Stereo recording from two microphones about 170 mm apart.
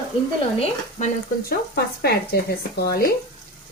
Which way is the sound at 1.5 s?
65° left (ahead or behind).